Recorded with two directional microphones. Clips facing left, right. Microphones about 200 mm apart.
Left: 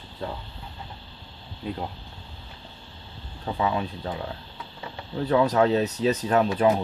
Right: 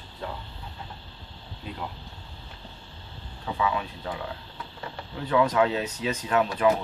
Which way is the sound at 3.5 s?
35° left (ahead or behind).